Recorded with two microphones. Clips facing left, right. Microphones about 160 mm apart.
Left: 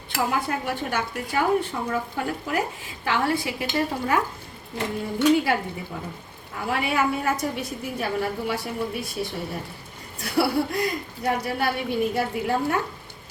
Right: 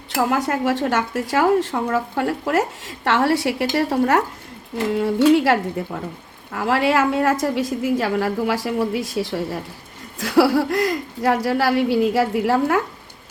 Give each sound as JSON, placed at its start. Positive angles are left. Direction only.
{"t": 0.3, "sound": "a woman's voice", "side_deg": -85}
{"t": 4.9, "sound": "a woman's voice", "side_deg": -85}